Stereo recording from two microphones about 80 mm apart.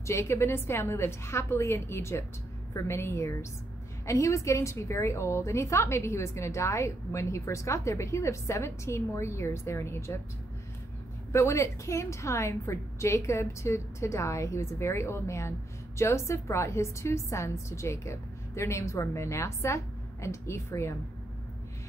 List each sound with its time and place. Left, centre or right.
0.0 s a woman's voice: left
11.3 s a woman's voice: left